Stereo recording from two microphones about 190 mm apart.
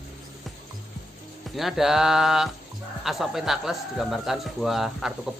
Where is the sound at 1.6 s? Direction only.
Centre (ahead or behind).